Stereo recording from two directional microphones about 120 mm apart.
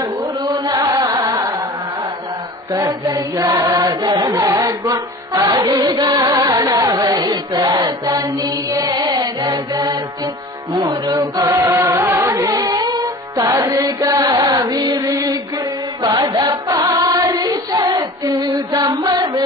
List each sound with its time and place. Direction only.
0.5 s carnatic music: 30° right (ahead or behind)
2.8 s chant: 30° right (ahead or behind)
4.0 s music: 35° right (ahead or behind)
10.7 s chant: 30° right (ahead or behind)
14.3 s carnatic music: 35° right (ahead or behind)
15.0 s music: 30° right (ahead or behind)
16.0 s chant: 35° right (ahead or behind)
16.6 s music: 30° right (ahead or behind)
18.7 s music: 45° right (ahead or behind)